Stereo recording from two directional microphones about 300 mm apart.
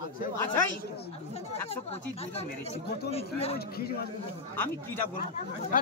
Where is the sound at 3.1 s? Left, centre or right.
Centre.